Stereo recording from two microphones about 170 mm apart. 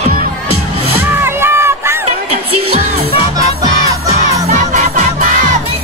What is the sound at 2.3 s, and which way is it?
Music, 35° right (ahead or behind).